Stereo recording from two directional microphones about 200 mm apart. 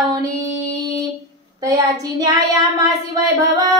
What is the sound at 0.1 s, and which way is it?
Music, 15° right (ahead or behind).